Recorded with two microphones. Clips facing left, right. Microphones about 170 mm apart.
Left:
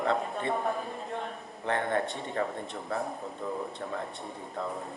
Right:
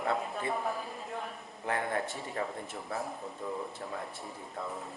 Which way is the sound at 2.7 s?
Centre (ahead or behind).